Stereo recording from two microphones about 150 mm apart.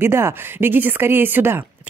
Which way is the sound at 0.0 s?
15° right (ahead or behind).